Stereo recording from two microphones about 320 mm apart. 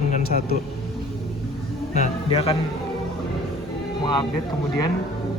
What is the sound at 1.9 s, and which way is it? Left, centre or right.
Speech, centre.